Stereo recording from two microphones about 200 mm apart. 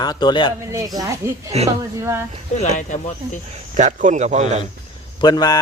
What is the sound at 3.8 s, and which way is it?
Speech, 35° right (ahead or behind).